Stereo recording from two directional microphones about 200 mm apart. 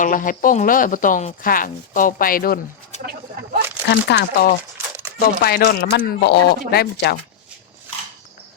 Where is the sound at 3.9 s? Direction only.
60° left (ahead or behind).